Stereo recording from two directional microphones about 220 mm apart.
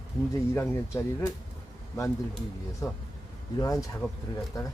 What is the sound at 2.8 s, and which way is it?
Speech, 15° left (ahead or behind).